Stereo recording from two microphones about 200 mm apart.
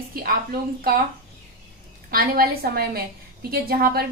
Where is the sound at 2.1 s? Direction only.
50° right (ahead or behind).